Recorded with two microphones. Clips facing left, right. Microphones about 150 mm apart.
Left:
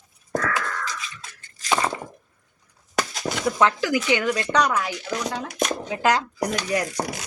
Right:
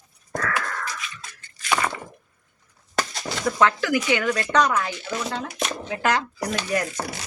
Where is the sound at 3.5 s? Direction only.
15° left (ahead or behind).